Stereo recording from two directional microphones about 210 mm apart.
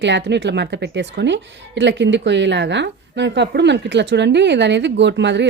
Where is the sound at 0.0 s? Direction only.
55° right (ahead or behind).